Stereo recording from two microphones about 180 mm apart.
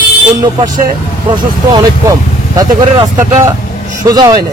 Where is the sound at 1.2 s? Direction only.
25° right (ahead or behind).